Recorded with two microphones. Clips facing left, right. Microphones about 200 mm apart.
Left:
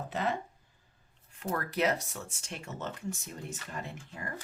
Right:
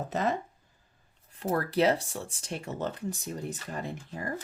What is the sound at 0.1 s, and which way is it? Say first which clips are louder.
Speech: right 3 dB; 40° right (ahead or behind).